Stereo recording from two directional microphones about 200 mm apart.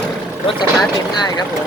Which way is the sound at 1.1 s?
20° left (ahead or behind).